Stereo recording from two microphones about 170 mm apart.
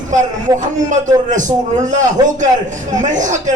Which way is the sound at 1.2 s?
45° right (ahead or behind).